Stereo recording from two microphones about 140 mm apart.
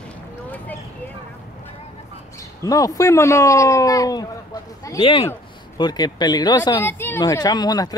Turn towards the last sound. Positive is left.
turn(degrees=25)  # may be behind; listen again after turning